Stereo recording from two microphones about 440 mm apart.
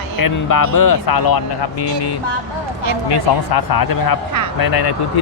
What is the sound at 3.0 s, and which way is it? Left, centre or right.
Speech, left.